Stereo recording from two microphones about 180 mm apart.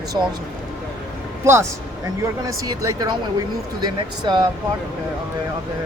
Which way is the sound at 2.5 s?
20° right (ahead or behind).